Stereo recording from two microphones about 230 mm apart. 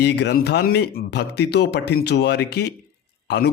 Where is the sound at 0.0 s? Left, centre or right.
Left.